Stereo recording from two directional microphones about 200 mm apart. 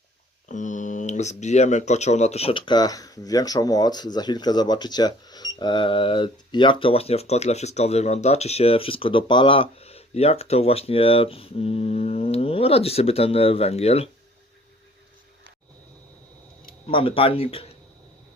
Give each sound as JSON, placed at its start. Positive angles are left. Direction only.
{"t": 0.4, "sound": "speech", "side_deg": 40}
{"t": 16.8, "sound": "speech", "side_deg": 25}